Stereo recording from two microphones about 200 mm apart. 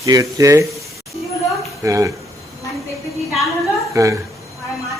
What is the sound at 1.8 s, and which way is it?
Speech, 15° right (ahead or behind).